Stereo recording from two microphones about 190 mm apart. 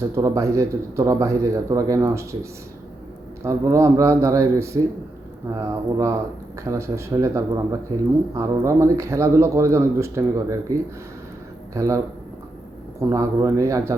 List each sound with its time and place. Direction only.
0.2 s a man's voice: 15° right (ahead or behind)
13.0 s a man's voice: 15° right (ahead or behind)